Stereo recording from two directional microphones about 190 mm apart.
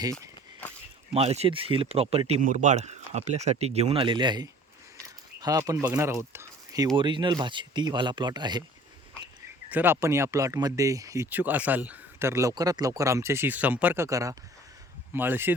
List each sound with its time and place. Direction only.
1.1 s speech: 35° right (ahead or behind)
9.6 s speech: 10° right (ahead or behind)